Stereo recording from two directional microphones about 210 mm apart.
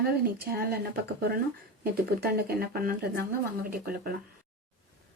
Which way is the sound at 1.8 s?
45° right (ahead or behind).